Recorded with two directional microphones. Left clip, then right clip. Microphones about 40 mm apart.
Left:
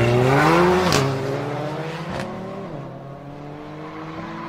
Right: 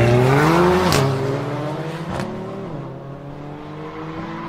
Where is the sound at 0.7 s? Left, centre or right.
Right.